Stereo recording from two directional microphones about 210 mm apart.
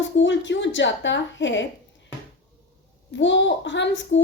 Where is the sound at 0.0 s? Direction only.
60° left (ahead or behind).